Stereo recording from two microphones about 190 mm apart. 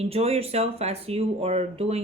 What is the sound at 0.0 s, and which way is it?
Speech, 30° right (ahead or behind).